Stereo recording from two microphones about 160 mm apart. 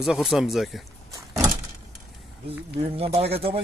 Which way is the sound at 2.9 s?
40° right (ahead or behind).